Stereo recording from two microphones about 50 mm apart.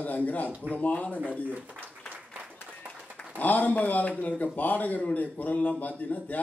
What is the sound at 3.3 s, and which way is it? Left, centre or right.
A man's voice, left.